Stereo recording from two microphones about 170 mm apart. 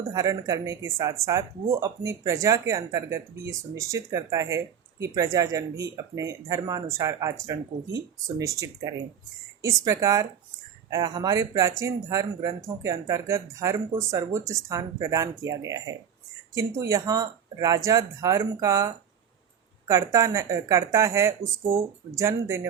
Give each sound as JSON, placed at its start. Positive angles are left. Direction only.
{"t": 0.1, "sound": "speech", "side_deg": -20}